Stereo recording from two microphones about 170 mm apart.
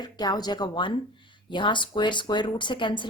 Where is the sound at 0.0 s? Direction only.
25° left (ahead or behind).